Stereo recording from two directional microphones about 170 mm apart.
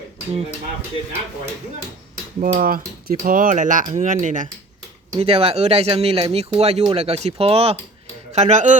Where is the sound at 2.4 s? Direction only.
55° right (ahead or behind).